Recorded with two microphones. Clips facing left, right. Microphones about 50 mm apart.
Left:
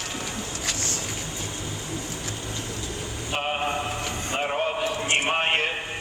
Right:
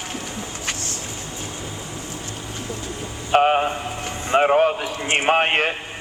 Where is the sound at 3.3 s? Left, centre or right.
Right.